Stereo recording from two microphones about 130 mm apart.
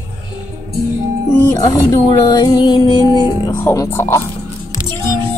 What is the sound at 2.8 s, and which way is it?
Music, 35° right (ahead or behind).